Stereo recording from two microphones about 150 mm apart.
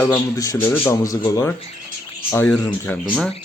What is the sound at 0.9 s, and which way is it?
Speech, 20° left (ahead or behind).